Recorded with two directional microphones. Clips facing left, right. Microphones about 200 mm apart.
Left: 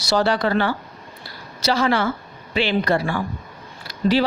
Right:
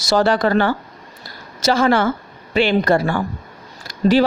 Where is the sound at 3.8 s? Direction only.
50° right (ahead or behind).